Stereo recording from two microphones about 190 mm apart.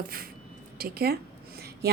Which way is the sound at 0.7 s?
55° right (ahead or behind).